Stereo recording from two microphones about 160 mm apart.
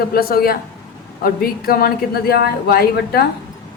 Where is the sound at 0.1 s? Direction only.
70° left (ahead or behind).